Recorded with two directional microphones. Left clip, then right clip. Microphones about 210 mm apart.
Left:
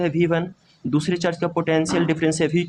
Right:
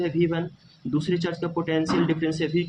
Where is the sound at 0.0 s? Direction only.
40° left (ahead or behind).